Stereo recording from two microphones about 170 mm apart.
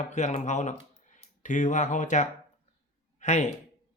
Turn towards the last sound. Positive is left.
turn(degrees=45)  # may be behind; listen again after turning